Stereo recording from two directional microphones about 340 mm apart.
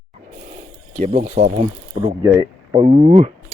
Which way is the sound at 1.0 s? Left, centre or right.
Right.